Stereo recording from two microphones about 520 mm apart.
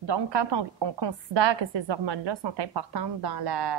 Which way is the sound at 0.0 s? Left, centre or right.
Right.